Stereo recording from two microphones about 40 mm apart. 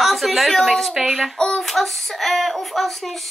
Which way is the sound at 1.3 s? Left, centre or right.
Centre.